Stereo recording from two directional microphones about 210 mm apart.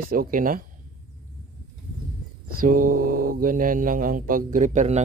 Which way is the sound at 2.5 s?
40° right (ahead or behind).